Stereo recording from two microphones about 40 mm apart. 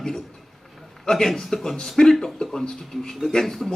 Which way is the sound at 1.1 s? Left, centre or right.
Centre.